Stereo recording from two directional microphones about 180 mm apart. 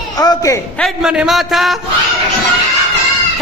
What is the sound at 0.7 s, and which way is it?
A man's voice, centre (ahead or behind).